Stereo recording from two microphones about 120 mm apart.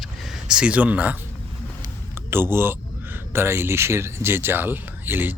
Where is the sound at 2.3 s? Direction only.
20° right (ahead or behind).